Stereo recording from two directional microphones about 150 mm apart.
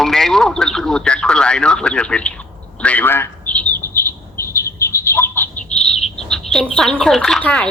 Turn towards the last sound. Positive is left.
turn(degrees=5)  # may be behind; listen again after turning